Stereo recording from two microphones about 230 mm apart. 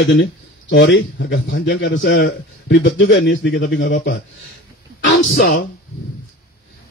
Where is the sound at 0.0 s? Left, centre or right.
Left.